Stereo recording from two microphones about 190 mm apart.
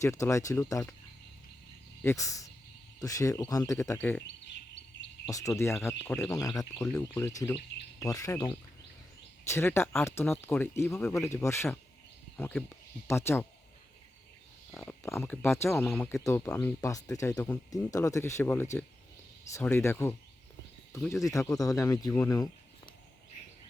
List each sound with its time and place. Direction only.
0.0 s speech: 15° left (ahead or behind)
2.0 s speech: 15° left (ahead or behind)
5.2 s speech: 15° left (ahead or behind)
14.7 s speech: 10° left (ahead or behind)